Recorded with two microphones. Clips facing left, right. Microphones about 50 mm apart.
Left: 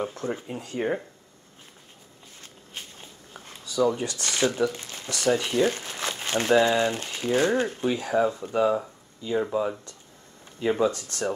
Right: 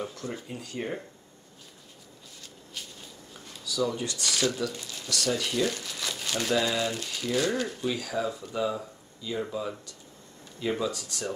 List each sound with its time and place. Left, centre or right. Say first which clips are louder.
0.0 s speech: left 5 dB; left
2.7 s speech: left 1 dB; left
10.8 s speech: left 7 dB; left